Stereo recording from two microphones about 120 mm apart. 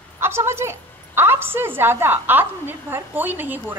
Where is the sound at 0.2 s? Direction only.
20° right (ahead or behind).